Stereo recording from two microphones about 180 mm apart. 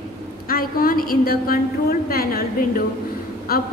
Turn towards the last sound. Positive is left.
turn(degrees=55)  # may be behind; listen again after turning